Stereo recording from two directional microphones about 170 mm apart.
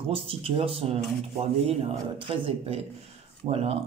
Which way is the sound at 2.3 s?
35° right (ahead or behind).